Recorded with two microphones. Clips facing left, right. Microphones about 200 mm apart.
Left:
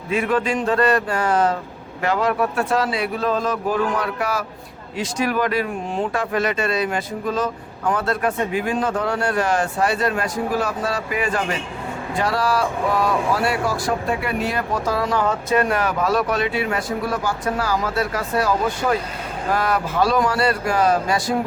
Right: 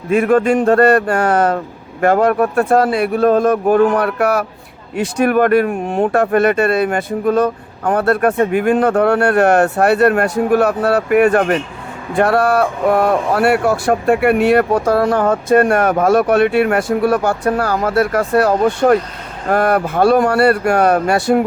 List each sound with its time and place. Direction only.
0.1 s speech: 50° right (ahead or behind)
1.2 s speech: 65° right (ahead or behind)
2.0 s speech: 50° right (ahead or behind)